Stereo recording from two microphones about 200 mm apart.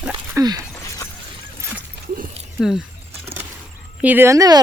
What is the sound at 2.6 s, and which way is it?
Speech, centre (ahead or behind).